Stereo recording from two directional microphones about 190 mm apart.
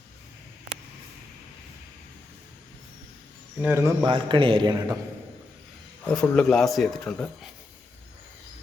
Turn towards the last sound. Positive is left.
turn(degrees=5)  # may be behind; listen again after turning